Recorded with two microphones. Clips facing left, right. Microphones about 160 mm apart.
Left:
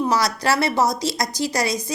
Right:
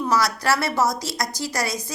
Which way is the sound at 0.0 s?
20° left (ahead or behind).